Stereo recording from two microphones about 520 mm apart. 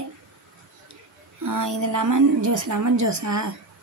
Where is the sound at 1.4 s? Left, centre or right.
Right.